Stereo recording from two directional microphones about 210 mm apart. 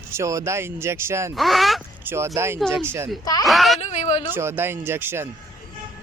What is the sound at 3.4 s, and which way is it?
Speech, centre (ahead or behind).